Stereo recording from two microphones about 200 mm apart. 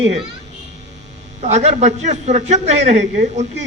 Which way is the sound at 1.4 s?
35° right (ahead or behind).